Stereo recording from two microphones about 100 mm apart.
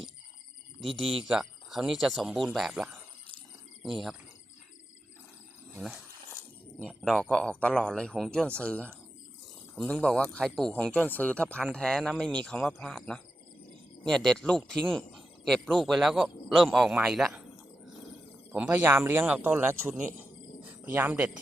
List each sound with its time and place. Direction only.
0.9 s speech: centre (ahead or behind)
7.0 s speech: 5° left (ahead or behind)
18.5 s a man's voice: 15° right (ahead or behind)
20.0 s a sound: 15° right (ahead or behind)